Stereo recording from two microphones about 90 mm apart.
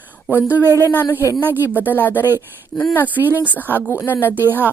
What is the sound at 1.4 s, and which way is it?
Speech, 20° right (ahead or behind).